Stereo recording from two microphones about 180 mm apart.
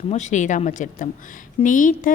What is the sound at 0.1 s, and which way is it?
Speech, 40° left (ahead or behind).